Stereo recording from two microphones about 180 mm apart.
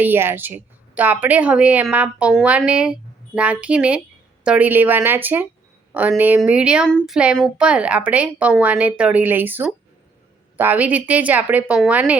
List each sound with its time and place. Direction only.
0.0 s a woman's voice: 10° right (ahead or behind)